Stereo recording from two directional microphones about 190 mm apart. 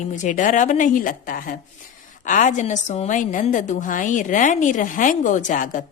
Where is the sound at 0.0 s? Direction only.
40° left (ahead or behind).